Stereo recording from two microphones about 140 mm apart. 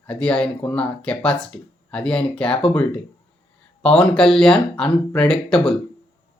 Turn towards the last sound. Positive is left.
turn(degrees=5)  # may be behind; listen again after turning